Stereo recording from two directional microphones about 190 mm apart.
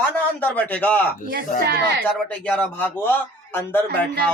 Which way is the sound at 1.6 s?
60° right (ahead or behind).